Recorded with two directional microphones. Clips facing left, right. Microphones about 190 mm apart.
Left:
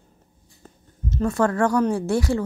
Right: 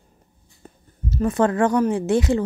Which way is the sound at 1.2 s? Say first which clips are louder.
Right 2 dB; 20° right (ahead or behind).